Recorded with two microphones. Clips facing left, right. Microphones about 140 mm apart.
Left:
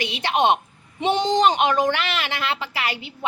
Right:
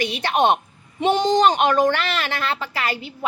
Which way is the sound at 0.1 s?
20° left (ahead or behind).